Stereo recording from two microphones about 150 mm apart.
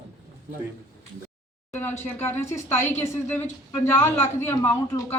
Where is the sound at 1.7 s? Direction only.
15° left (ahead or behind).